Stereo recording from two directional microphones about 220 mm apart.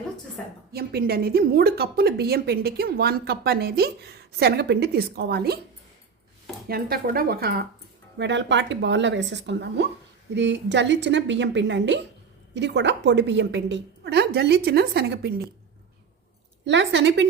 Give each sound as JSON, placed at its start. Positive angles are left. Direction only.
{"t": 0.7, "sound": "speech", "side_deg": -45}
{"t": 6.7, "sound": "speech", "side_deg": -45}
{"t": 8.2, "sound": "speech", "side_deg": -55}
{"t": 16.6, "sound": "speech", "side_deg": -55}